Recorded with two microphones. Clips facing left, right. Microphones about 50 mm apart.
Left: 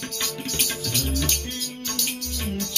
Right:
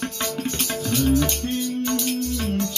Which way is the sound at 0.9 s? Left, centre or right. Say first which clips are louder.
Right 11 dB; right.